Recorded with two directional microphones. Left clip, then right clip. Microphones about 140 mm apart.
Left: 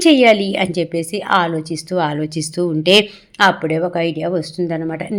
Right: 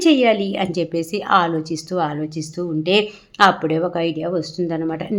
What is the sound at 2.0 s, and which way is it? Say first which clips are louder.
Speech: left 4 dB; 15° left (ahead or behind).